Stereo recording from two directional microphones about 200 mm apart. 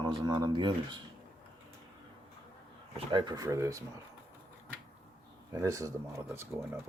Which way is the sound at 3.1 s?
20° right (ahead or behind).